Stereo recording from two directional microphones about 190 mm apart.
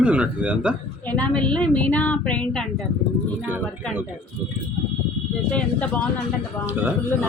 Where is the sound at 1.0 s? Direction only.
10° left (ahead or behind).